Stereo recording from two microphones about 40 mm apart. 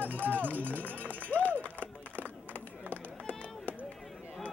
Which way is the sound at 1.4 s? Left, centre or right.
Left.